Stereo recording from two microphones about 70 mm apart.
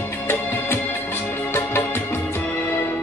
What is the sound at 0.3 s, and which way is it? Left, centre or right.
Music, left.